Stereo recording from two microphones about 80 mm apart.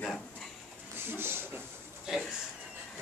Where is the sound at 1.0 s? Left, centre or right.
Right.